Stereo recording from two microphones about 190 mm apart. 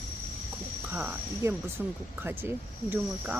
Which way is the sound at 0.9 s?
10° right (ahead or behind).